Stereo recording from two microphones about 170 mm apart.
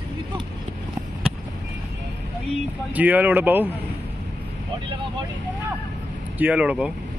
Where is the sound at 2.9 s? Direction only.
10° right (ahead or behind).